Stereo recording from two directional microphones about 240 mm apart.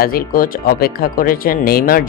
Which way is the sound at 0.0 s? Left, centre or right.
Left.